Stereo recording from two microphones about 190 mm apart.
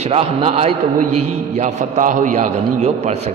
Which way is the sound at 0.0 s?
30° right (ahead or behind).